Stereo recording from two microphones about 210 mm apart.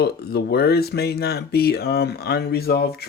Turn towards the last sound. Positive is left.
turn(degrees=50)  # may be behind; listen again after turning